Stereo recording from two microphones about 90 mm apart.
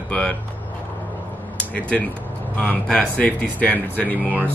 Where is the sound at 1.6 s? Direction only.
15° left (ahead or behind).